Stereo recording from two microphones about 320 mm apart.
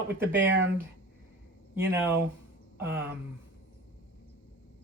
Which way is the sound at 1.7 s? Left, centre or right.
Centre.